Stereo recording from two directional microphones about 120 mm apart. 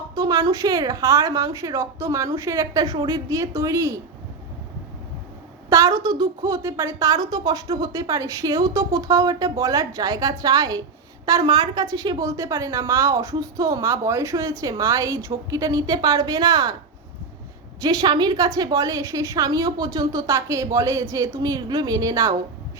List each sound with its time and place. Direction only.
0.1 s a woman's voice: 30° right (ahead or behind)
5.6 s a woman's voice: 30° right (ahead or behind)
17.7 s a woman's voice: 35° right (ahead or behind)